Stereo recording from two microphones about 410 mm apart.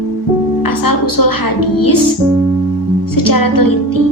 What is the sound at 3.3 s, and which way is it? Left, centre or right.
Speech, left.